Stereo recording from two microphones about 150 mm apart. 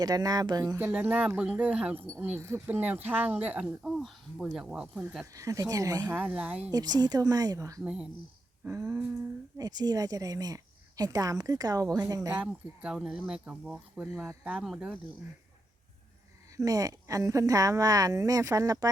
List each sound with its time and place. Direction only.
0.0 s speech: 25° right (ahead or behind); by 5.2 s 10° right (ahead or behind)
5.2 s a woman's voice: 20° right (ahead or behind)
6.1 s speech: 10° right (ahead or behind)
6.7 s a woman's voice: 25° right (ahead or behind)
7.9 s speech: 5° right (ahead or behind)
8.6 s humming: 10° right (ahead or behind)
9.6 s a woman's voice: 25° right (ahead or behind)
12.4 s speech: 5° right (ahead or behind)
16.6 s a woman's voice: 25° right (ahead or behind)